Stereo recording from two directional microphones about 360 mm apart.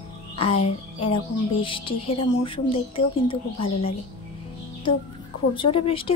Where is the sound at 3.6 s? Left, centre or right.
Left.